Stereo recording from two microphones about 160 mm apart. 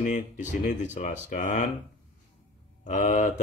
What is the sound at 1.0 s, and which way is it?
Speech, 45° left (ahead or behind).